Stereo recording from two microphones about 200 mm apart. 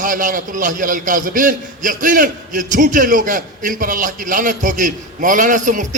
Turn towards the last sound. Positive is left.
turn(degrees=-40)  # may be behind; listen again after turning